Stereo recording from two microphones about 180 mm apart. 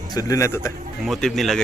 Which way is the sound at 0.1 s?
20° left (ahead or behind).